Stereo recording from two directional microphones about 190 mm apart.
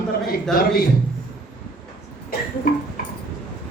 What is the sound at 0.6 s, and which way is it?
Speech, 50° left (ahead or behind).